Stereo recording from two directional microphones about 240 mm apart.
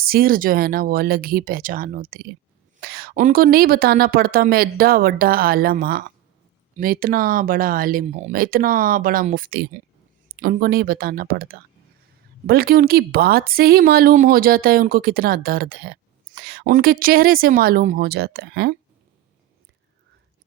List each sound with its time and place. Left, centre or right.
0.0 s speech: right